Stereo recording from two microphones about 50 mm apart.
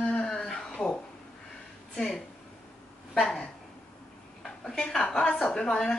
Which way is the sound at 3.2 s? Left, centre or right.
Centre.